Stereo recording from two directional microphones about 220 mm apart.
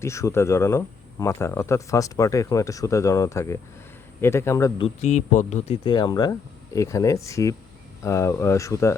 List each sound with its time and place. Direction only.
0.0 s speech: 15° left (ahead or behind)
4.9 s speech: 30° left (ahead or behind); by 9.0 s 15° left (ahead or behind)